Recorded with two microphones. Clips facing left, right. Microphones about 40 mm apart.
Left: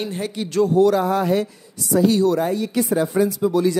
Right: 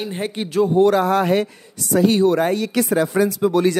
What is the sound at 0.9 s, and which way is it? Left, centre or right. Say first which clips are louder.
Speech: right 2 dB; right.